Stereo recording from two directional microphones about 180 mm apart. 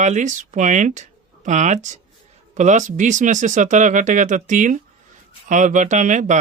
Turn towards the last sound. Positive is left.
turn(degrees=-40)  # may be behind; listen again after turning